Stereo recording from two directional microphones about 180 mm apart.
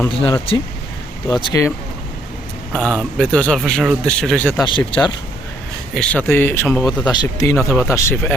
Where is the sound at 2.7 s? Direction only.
10° right (ahead or behind).